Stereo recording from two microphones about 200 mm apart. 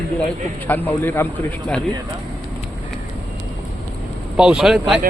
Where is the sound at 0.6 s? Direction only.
10° left (ahead or behind).